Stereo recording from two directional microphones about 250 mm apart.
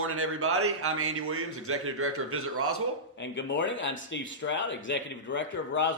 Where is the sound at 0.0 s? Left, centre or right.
Right.